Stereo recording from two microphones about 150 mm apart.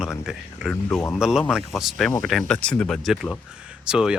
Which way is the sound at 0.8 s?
15° left (ahead or behind).